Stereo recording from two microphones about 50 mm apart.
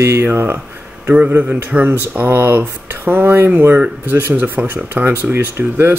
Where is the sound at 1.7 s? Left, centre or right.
Right.